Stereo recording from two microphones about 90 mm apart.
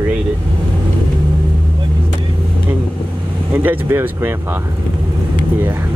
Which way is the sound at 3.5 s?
20° right (ahead or behind).